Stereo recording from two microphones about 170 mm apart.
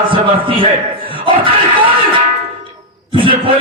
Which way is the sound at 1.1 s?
30° right (ahead or behind).